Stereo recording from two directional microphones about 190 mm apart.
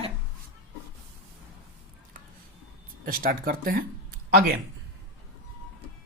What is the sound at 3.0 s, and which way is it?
Speech, 50° right (ahead or behind).